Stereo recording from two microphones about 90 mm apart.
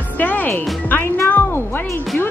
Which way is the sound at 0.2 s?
20° left (ahead or behind).